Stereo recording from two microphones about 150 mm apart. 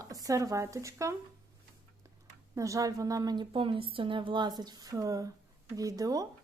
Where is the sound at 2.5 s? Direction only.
20° right (ahead or behind).